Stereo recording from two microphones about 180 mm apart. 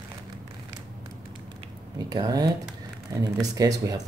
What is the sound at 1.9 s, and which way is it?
Speech, 20° right (ahead or behind).